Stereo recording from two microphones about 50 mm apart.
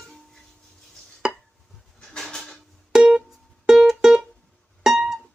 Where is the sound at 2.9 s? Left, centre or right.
Centre.